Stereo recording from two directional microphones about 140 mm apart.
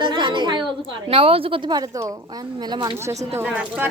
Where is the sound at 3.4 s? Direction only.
10° right (ahead or behind).